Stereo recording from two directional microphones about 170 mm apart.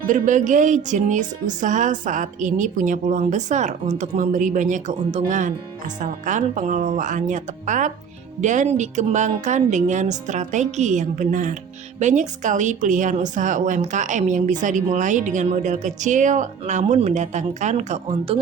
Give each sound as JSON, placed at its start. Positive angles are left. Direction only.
{"t": 0.1, "sound": "a woman's voice", "side_deg": -45}